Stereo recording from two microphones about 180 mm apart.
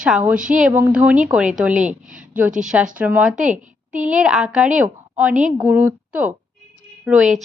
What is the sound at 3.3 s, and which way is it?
Speech, 45° right (ahead or behind).